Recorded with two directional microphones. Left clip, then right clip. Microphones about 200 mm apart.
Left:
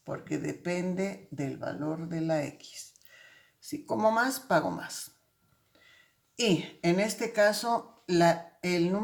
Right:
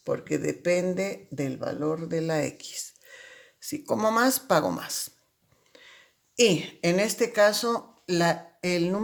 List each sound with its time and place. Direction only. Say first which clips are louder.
0.1 s speech: right 7 dB; 45° right (ahead or behind)
6.3 s speech: right 6 dB; 50° right (ahead or behind)